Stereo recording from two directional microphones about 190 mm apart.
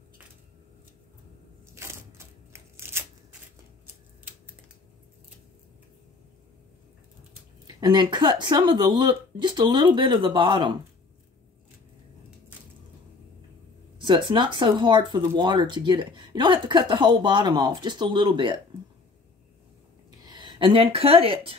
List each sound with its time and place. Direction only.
1.8 s a sound: 15° right (ahead or behind)
4.2 s typing: 10° right (ahead or behind)
7.6 s speech: 25° right (ahead or behind)
14.0 s speech: 25° right (ahead or behind)
20.2 s speech: 25° right (ahead or behind)